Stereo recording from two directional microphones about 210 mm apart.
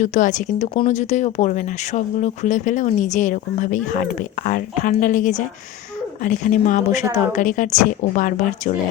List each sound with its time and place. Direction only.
0.0 s speech: 35° left (ahead or behind)